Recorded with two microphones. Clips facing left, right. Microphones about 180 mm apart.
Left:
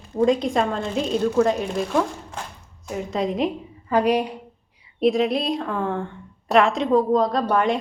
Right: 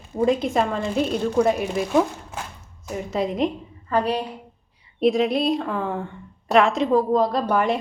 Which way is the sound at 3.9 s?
15° left (ahead or behind).